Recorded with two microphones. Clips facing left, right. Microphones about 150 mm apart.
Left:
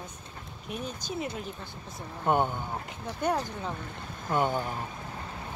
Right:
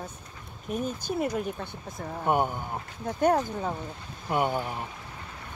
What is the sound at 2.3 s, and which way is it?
Speech, 10° right (ahead or behind).